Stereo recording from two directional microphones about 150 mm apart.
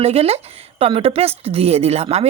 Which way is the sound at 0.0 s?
40° right (ahead or behind).